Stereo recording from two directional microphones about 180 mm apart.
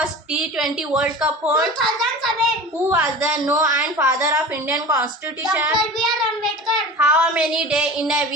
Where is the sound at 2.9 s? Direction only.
15° right (ahead or behind).